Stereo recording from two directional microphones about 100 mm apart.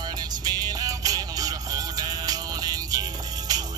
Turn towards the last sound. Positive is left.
turn(degrees=-40)  # may be behind; listen again after turning